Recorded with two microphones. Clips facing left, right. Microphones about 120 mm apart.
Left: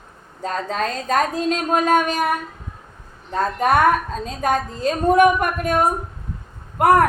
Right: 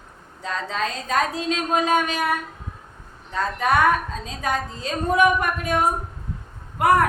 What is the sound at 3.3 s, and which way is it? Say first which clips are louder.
A woman's voice: left 3 dB; 45° left (ahead or behind).